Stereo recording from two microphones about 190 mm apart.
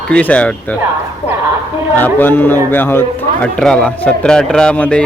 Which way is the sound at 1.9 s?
10° left (ahead or behind).